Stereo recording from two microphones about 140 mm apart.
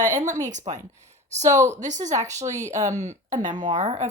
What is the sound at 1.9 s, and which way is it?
Speech, 60° right (ahead or behind).